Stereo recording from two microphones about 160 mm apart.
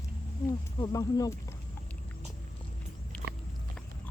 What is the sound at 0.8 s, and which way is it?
Speech, 20° left (ahead or behind).